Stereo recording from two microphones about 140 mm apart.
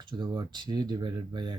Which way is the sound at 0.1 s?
30° right (ahead or behind).